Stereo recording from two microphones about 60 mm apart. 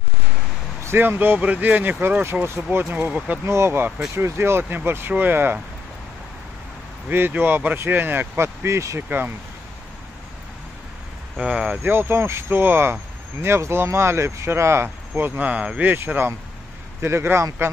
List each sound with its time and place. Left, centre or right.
0.8 s speech: right
2.8 s speech: right
3.4 s speech: right
7.1 s speech: right
8.6 s speech: right
11.3 s speech: centre
11.8 s speech: right
13.6 s speech: right
15.3 s speech: right
15.8 s speech: right
17.0 s speech: right